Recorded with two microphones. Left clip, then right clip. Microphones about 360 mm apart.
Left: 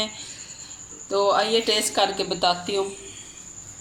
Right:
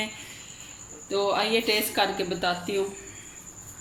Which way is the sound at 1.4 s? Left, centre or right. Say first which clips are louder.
Left 3 dB; centre.